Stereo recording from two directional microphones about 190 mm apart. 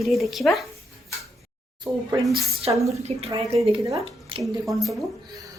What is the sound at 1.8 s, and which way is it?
A woman's voice, 15° right (ahead or behind).